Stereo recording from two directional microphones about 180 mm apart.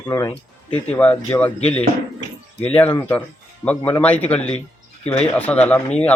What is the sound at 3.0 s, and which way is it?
Speech, 10° left (ahead or behind).